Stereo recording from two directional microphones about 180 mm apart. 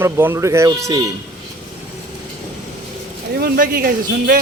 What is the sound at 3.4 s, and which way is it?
Speech, 55° right (ahead or behind).